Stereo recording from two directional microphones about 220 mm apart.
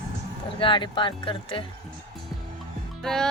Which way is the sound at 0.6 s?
20° left (ahead or behind).